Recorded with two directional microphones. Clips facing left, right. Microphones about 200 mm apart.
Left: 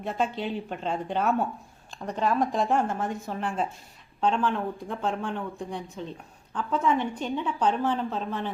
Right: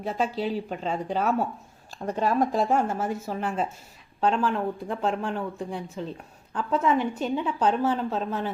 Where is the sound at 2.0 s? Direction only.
20° right (ahead or behind).